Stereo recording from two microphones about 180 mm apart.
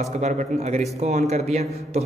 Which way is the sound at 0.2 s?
40° right (ahead or behind).